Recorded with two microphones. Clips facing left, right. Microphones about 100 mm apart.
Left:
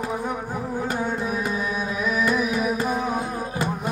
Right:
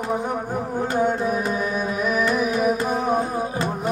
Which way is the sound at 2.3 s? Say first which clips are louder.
Right 2 dB; 45° right (ahead or behind).